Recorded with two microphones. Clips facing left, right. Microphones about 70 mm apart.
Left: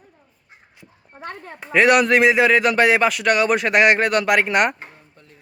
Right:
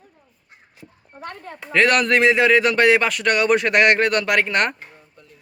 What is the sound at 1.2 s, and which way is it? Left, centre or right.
Speech, left.